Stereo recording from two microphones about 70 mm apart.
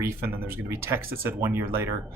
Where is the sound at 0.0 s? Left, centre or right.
Right.